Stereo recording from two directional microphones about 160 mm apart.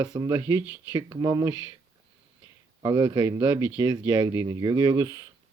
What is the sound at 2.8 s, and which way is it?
Speech, 30° right (ahead or behind).